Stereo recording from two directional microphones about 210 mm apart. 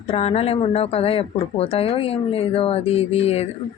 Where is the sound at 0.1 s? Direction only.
30° left (ahead or behind).